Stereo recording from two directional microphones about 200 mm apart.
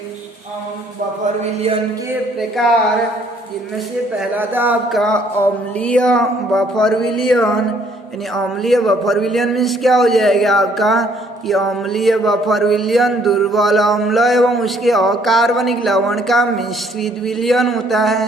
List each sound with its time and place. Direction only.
1.4 s a sound: 30° right (ahead or behind)
2.4 s a man's voice: centre (ahead or behind)
4.2 s a man's voice: 10° right (ahead or behind)